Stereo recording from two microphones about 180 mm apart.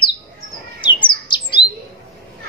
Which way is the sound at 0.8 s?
25° left (ahead or behind).